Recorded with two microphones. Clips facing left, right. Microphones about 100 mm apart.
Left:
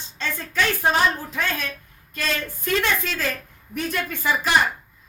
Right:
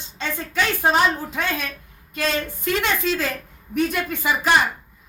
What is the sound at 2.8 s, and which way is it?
A woman's voice, 20° right (ahead or behind).